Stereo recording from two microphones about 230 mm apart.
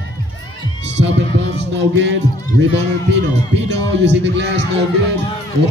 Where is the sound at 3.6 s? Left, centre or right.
Right.